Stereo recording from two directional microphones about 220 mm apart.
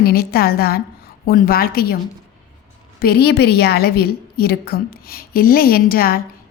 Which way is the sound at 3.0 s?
45° left (ahead or behind).